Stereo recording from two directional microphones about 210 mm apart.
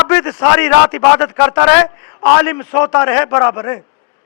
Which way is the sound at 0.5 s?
10° left (ahead or behind).